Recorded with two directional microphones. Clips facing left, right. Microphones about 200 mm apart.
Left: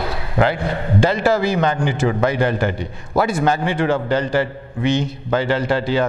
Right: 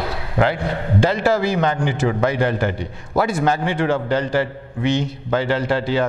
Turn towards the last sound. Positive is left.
turn(degrees=15)  # may be behind; listen again after turning